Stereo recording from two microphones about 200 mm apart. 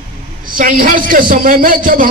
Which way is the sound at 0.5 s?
45° right (ahead or behind).